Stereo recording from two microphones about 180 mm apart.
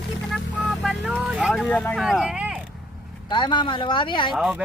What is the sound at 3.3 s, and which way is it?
Speech, 25° left (ahead or behind).